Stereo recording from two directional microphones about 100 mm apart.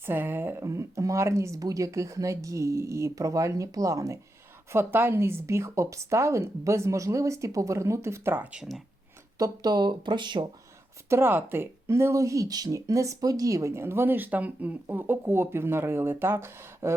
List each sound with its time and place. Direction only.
0.0 s speech: 20° right (ahead or behind)
9.4 s speech: 40° right (ahead or behind)
11.1 s speech: 20° right (ahead or behind)